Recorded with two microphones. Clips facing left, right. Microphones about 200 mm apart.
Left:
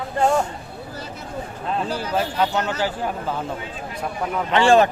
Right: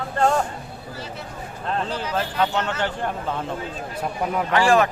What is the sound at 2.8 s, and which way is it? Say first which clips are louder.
Speech: left 1 dB; 5° left (ahead or behind).